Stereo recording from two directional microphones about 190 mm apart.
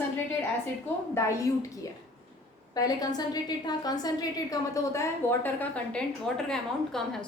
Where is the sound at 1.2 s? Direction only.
15° left (ahead or behind).